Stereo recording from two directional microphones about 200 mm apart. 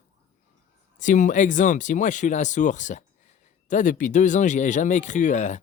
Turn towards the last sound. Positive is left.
turn(degrees=35)  # may be behind; listen again after turning